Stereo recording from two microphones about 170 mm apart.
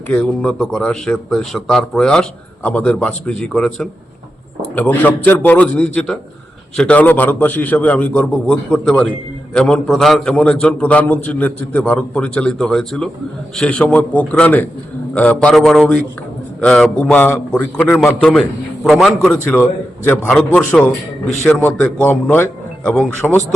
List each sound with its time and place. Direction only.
0.1 s a man's voice: 5° left (ahead or behind)